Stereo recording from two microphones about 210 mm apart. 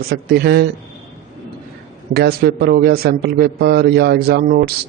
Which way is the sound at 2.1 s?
50° right (ahead or behind).